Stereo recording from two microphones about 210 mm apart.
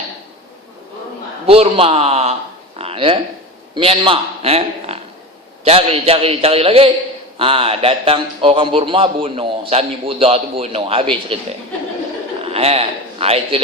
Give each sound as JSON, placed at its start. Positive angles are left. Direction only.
{"t": 1.5, "sound": "a man's voice", "side_deg": -25}
{"t": 2.7, "sound": "a sound", "side_deg": -25}
{"t": 3.8, "sound": "a man's voice", "side_deg": -25}
{"t": 12.5, "sound": "a man's voice", "side_deg": -30}